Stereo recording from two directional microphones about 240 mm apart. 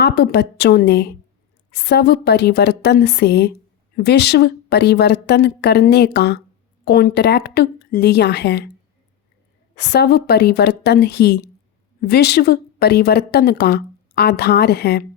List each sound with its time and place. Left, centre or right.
0.0 s a woman's voice: left
9.7 s a woman's voice: left